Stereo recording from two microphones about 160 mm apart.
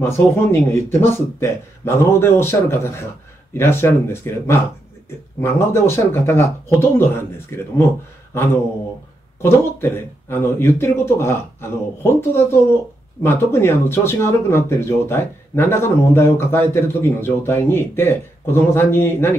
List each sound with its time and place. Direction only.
0.0 s speech: 15° left (ahead or behind)
9.4 s speech: 15° left (ahead or behind)